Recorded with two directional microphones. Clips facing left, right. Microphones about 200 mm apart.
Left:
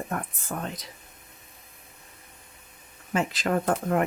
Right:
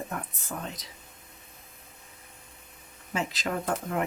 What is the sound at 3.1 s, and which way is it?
Speech, 55° left (ahead or behind).